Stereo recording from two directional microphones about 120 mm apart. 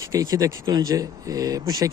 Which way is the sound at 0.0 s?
30° right (ahead or behind).